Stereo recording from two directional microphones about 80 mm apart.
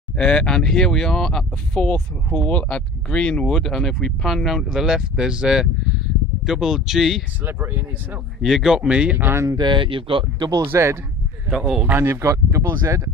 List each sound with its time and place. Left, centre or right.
0.2 s speech: centre
7.4 s speech: right
8.4 s speech: centre
9.3 s speech: right
9.6 s speech: right
10.6 s speech: right
11.4 s speech: centre
11.8 s speech: right